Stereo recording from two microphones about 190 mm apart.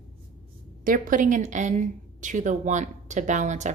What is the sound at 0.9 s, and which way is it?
Speech, 45° right (ahead or behind).